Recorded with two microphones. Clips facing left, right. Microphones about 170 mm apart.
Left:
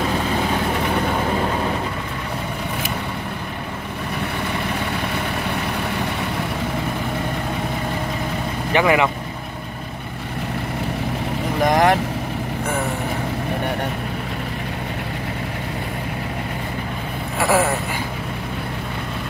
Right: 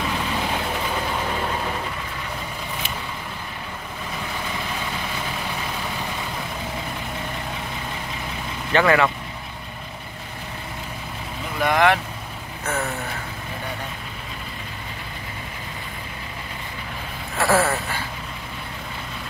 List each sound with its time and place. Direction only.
8.7 s speech: 15° left (ahead or behind)
11.6 s speech: 40° left (ahead or behind)
17.4 s speech: 15° left (ahead or behind)